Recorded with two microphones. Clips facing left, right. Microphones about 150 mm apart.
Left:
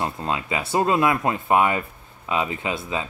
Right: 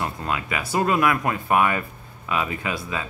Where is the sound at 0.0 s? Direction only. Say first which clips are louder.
Left 1 dB; 25° left (ahead or behind).